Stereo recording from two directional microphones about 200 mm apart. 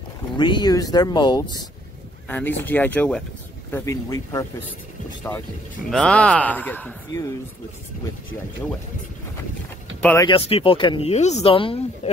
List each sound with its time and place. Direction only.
0.4 s speech: 20° left (ahead or behind)
2.2 s a man's voice: 10° left (ahead or behind)
3.7 s a man's voice: 15° left (ahead or behind)
5.9 s a man's voice: 5° left (ahead or behind)
9.9 s a sound: 5° left (ahead or behind)
10.2 s speech: 25° left (ahead or behind)